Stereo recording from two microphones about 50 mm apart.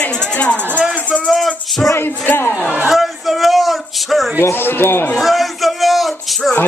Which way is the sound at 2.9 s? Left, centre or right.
Centre.